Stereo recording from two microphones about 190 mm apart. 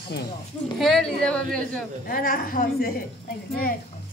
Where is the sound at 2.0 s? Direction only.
50° left (ahead or behind).